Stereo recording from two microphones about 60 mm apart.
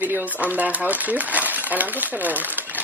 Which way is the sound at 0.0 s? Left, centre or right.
Right.